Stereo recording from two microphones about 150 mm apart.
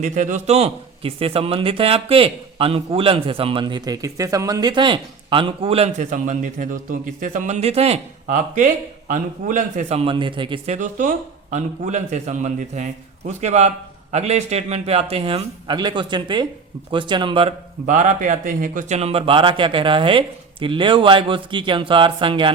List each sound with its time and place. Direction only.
0.0 s a man's voice: 55° right (ahead or behind)
6.1 s a man's voice: 60° right (ahead or behind); by 10.6 s 35° right (ahead or behind)
10.7 s a man's voice: 55° right (ahead or behind); by 17.5 s 35° right (ahead or behind)
17.8 s a man's voice: 55° right (ahead or behind); by 22.5 s 35° right (ahead or behind)